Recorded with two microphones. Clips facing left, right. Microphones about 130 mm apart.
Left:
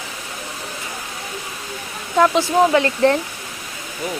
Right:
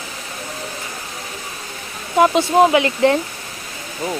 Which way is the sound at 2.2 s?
20° right (ahead or behind).